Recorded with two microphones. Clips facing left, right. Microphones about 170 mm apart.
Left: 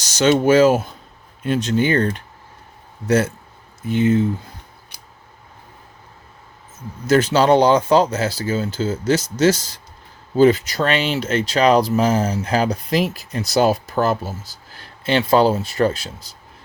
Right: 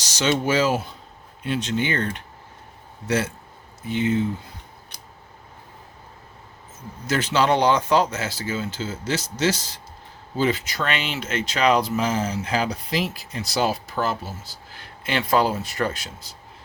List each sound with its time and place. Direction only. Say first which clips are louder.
0.0 s speech: left 7 dB; 50° left (ahead or behind)
3.8 s speech: left 6 dB; 45° left (ahead or behind)
7.1 s speech: left 7 dB; 40° left (ahead or behind)